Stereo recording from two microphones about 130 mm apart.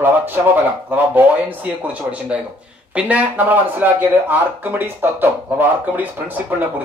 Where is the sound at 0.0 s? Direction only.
15° right (ahead or behind).